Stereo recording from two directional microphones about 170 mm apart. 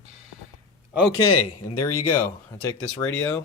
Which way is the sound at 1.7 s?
20° left (ahead or behind).